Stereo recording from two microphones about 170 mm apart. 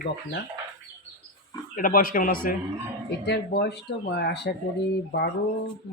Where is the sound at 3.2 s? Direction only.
80° left.